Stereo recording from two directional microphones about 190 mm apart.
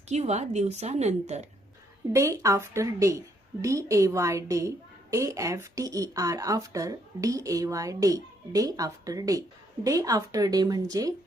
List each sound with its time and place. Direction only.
0.1 s a woman's voice: 35° right (ahead or behind)
2.1 s speech: 15° right (ahead or behind)